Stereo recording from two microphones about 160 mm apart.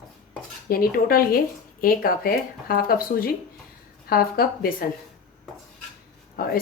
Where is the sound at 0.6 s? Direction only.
70° left (ahead or behind).